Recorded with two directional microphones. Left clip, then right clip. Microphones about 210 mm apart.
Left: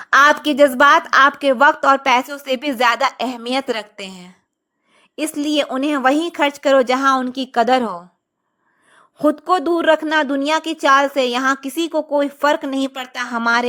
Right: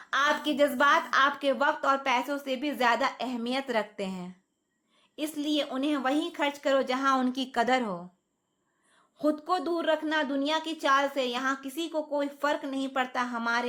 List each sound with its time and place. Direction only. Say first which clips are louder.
0.0 s a woman's voice: left 14 dB; 40° left (ahead or behind); by 7.9 s 25° left (ahead or behind)
9.1 s a woman's voice: left 12 dB; 40° left (ahead or behind)